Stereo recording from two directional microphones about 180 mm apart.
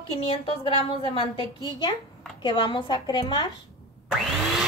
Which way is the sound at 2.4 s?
25° left (ahead or behind).